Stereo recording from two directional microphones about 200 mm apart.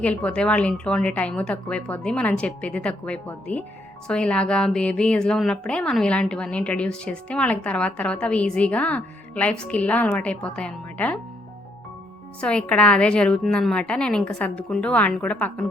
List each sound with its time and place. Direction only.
0.0 s a woman's voice: 5° left (ahead or behind)
12.4 s a woman's voice: 5° left (ahead or behind)